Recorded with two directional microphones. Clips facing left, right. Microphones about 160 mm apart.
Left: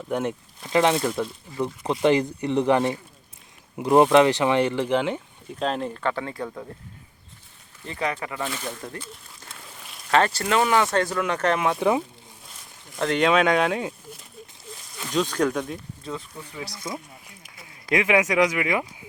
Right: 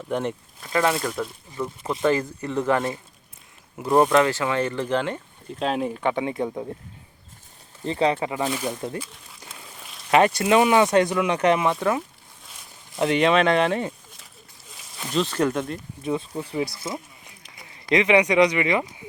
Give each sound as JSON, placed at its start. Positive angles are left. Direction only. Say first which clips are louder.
{"t": 0.1, "sound": "speech", "louder": "even", "side_deg": 5}
{"t": 0.6, "sound": "speech", "louder": "left 2 dB", "side_deg": 20}
{"t": 5.5, "sound": "speech", "louder": "right 2 dB", "side_deg": -5}
{"t": 7.9, "sound": "speech", "louder": "right 7 dB", "side_deg": -25}
{"t": 11.8, "sound": "speech", "louder": "left 2 dB", "side_deg": 15}
{"t": 13.0, "sound": "speech", "louder": "right 1 dB", "side_deg": -5}
{"t": 15.1, "sound": "speech", "louder": "even", "side_deg": -5}
{"t": 16.3, "sound": "speech", "louder": "right 9 dB", "side_deg": -35}
{"t": 17.7, "sound": "speech", "louder": "right 3 dB", "side_deg": 5}